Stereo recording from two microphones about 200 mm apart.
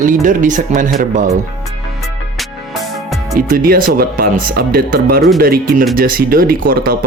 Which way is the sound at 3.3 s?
45° right (ahead or behind).